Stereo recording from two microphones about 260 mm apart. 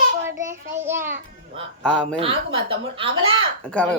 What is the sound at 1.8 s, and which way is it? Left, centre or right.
Speech, centre.